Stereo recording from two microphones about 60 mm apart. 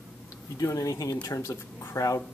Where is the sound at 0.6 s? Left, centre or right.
Left.